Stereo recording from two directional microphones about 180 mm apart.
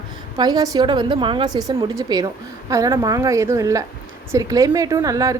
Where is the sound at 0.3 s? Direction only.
20° right (ahead or behind).